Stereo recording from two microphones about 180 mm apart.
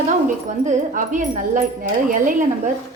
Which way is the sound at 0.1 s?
40° right (ahead or behind).